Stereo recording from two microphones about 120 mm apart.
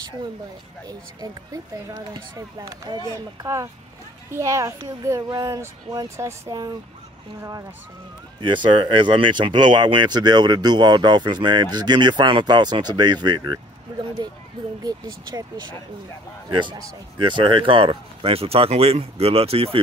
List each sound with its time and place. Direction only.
0.8 s speech: 30° right (ahead or behind)
2.9 s speech: 45° right (ahead or behind)
3.3 s a child's voice: 25° right (ahead or behind)
8.4 s speech: 40° right (ahead or behind)